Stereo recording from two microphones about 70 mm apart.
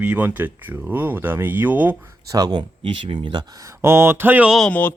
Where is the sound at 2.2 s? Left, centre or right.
Right.